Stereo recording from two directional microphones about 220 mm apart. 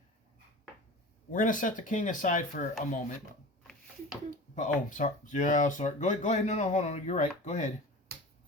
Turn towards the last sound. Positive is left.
turn(degrees=35)  # may be behind; listen again after turning